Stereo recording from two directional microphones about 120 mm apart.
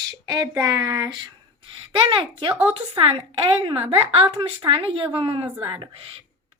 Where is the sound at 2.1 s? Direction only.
45° right (ahead or behind).